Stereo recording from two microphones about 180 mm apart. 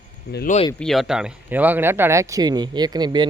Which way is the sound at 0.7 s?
Centre (ahead or behind).